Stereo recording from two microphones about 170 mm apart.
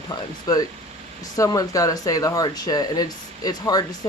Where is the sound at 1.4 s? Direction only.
20° left (ahead or behind).